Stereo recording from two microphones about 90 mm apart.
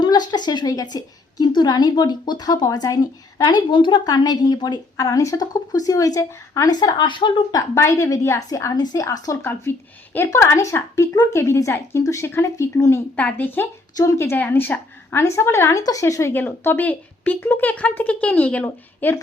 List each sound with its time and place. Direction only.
0.0 s a woman's voice: 50° left (ahead or behind)
3.7 s a woman's voice: 65° left (ahead or behind)
4.0 s a woman's voice: 50° left (ahead or behind)
4.9 s a woman's voice: 35° left (ahead or behind); by 7.4 s 65° left (ahead or behind)
7.8 s a woman's voice: 30° left (ahead or behind)
8.7 s a woman's voice: 50° left (ahead or behind)
9.4 s a woman's voice: 25° left (ahead or behind)
13.1 s speech: 20° left (ahead or behind)
13.9 s speech: 40° left (ahead or behind)
14.2 s a woman's voice: 25° left (ahead or behind)
16.3 s speech: 20° left (ahead or behind)